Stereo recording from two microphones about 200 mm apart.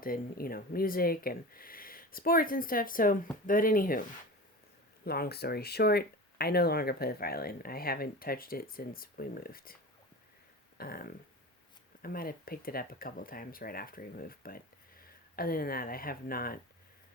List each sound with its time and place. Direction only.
0.0 s speech: 45° left (ahead or behind)
5.0 s speech: 50° left (ahead or behind)
10.8 s a sound: 50° left (ahead or behind)
12.0 s speech: 45° left (ahead or behind)